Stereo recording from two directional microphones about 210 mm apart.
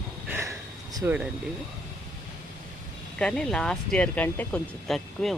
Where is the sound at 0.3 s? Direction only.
10° right (ahead or behind).